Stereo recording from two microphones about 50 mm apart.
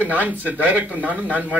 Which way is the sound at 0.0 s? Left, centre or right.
Right.